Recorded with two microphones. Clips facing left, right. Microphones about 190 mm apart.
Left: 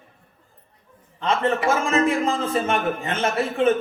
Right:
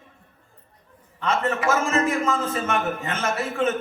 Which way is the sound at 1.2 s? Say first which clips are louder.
Left 2 dB; 30° left (ahead or behind).